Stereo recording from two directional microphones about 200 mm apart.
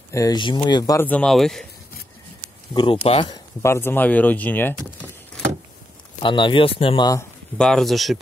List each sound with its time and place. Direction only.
0.1 s speech: 20° left (ahead or behind); by 1.7 s centre (ahead or behind)
2.7 s speech: 25° left (ahead or behind)
3.6 s speech: 10° left (ahead or behind)
6.2 s speech: 25° left (ahead or behind)
7.5 s speech: 5° left (ahead or behind)